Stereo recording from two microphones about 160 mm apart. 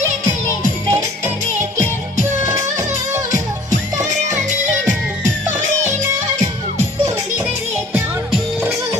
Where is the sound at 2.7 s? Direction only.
20° right (ahead or behind).